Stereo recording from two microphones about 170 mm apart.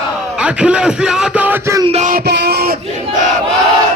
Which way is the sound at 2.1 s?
75° right (ahead or behind).